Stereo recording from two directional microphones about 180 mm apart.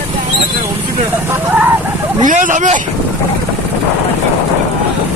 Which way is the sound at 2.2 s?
45° right (ahead or behind).